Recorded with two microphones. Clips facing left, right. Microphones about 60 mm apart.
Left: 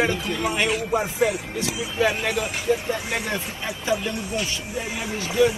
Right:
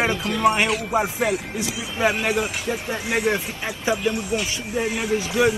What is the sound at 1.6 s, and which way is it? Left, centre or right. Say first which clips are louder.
Speech: left 1 dB; right.